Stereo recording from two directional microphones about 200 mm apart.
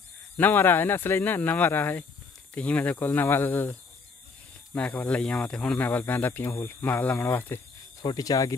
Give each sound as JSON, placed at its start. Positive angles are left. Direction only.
{"t": 0.4, "sound": "speech", "side_deg": 10}
{"t": 4.7, "sound": "speech", "side_deg": 5}